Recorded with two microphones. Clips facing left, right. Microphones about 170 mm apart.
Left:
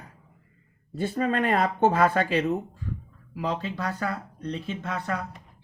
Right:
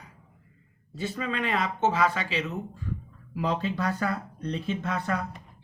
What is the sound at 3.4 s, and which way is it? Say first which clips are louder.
Speech: right 2 dB; 40° left (ahead or behind).